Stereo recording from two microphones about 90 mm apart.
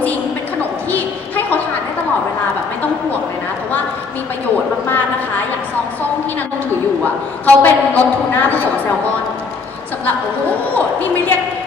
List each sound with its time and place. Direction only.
0.9 s a sound: 20° left (ahead or behind)
7.4 s a woman's voice: 20° left (ahead or behind)
10.8 s a woman's voice: 20° left (ahead or behind)